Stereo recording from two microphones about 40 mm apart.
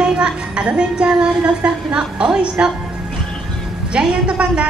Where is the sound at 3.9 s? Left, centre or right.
Right.